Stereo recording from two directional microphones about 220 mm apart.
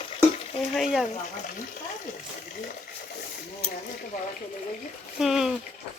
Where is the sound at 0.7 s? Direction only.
Centre (ahead or behind).